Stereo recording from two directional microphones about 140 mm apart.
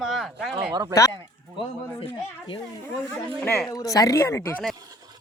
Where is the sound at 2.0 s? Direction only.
35° left (ahead or behind).